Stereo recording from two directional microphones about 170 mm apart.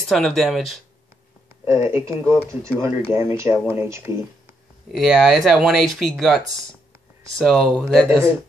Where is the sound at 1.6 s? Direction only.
15° right (ahead or behind).